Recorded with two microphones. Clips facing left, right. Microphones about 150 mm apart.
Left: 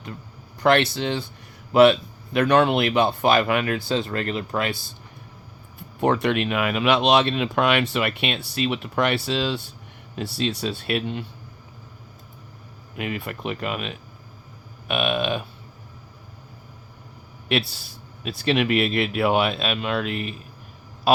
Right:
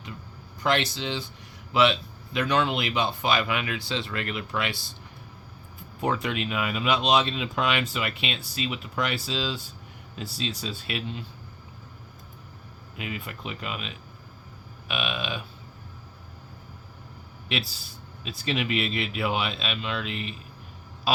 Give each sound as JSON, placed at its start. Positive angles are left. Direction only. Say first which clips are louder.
{"t": 0.6, "sound": "speech", "louder": "left 7 dB", "side_deg": 65}
{"t": 6.0, "sound": "speech", "louder": "left 7 dB", "side_deg": 65}
{"t": 13.0, "sound": "speech", "louder": "left 6 dB", "side_deg": 55}
{"t": 17.5, "sound": "speech", "louder": "left 7 dB", "side_deg": 65}